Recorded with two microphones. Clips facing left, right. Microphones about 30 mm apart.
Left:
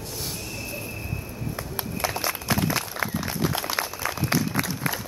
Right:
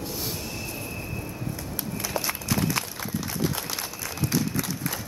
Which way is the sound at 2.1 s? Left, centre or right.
Centre.